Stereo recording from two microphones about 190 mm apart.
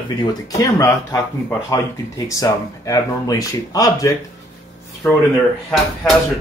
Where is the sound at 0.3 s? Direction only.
20° left (ahead or behind).